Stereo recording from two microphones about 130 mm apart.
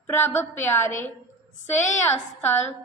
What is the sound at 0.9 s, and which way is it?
Speech, 80° left.